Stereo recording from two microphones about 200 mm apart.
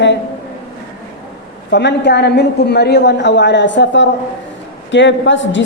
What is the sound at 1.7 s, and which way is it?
A man's voice, 60° left (ahead or behind).